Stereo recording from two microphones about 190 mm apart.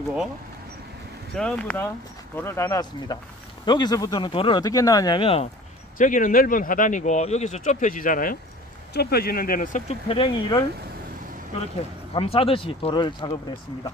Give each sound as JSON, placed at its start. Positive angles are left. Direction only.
{"t": 1.3, "sound": "speech", "side_deg": 5}
{"t": 5.9, "sound": "speech", "side_deg": 45}
{"t": 12.1, "sound": "speech", "side_deg": 30}